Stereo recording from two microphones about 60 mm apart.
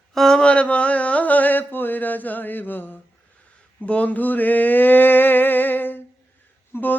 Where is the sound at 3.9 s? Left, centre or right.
Left.